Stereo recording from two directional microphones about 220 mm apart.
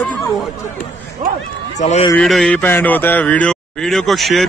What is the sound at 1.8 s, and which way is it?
Speech, 30° left (ahead or behind).